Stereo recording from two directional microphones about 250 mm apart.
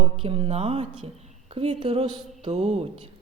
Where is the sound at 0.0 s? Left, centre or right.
Right.